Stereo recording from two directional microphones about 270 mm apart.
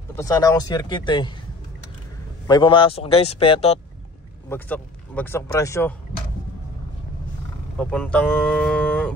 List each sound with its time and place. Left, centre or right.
0.1 s speech: centre
2.4 s a man's voice: centre
4.5 s speech: centre
7.7 s speech: centre